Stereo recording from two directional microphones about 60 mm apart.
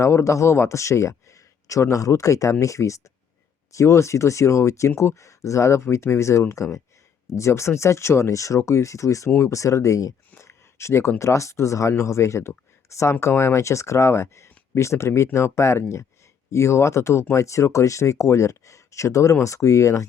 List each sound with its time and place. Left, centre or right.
0.0 s speech: left
10.3 s a sound: left
11.2 s speech: left